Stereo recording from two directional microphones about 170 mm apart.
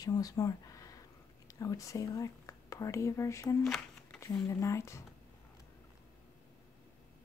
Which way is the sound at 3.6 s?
Centre (ahead or behind).